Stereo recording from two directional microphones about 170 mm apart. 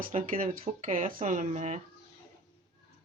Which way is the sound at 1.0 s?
50° right (ahead or behind).